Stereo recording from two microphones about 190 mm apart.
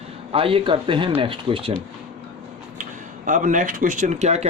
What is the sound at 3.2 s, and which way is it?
Speech, 45° right (ahead or behind).